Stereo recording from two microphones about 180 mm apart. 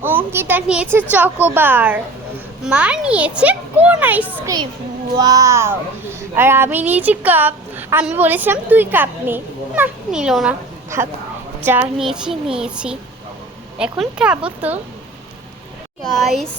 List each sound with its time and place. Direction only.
0.0 s speech: 10° right (ahead or behind)
5.1 s speech: 20° right (ahead or behind); by 10.5 s 5° right (ahead or behind)
10.9 s a child's voice: 15° right (ahead or behind)
16.1 s a child's voice: centre (ahead or behind)